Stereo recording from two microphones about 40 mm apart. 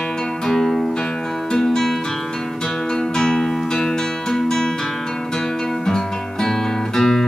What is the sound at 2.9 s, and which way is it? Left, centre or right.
Music, centre.